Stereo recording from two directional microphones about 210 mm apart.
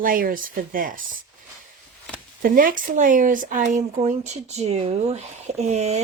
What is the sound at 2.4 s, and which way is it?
Speech, 40° right (ahead or behind).